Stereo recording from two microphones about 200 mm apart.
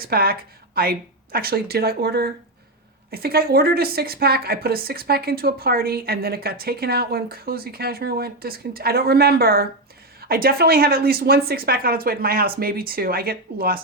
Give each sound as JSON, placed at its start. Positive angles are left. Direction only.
{"t": 0.0, "sound": "a woman's voice", "side_deg": -50}